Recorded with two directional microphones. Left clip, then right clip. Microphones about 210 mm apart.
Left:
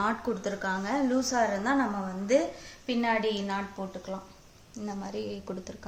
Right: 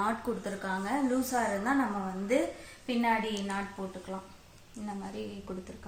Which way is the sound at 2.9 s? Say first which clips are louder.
Left 1 dB; 50° left (ahead or behind).